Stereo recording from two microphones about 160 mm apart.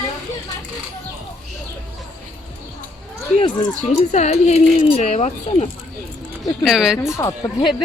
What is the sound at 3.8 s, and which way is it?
Speech, 45° left (ahead or behind).